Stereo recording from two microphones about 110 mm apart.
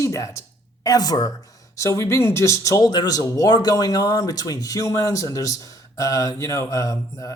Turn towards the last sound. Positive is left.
turn(degrees=30)  # may be behind; listen again after turning